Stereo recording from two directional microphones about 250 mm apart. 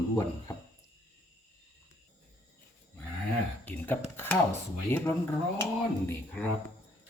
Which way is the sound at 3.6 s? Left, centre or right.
Centre.